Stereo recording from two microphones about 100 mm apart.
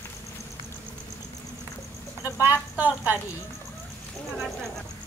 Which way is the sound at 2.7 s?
15° right (ahead or behind).